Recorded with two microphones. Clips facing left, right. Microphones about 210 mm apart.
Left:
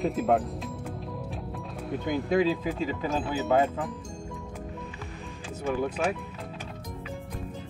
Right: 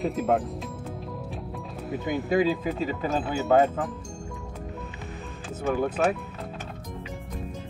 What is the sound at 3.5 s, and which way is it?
Speech, 45° right (ahead or behind).